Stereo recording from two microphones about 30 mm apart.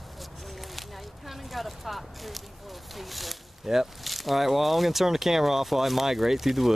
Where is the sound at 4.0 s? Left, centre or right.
Centre.